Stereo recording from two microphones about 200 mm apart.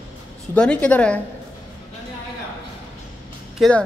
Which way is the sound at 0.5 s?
5° left (ahead or behind).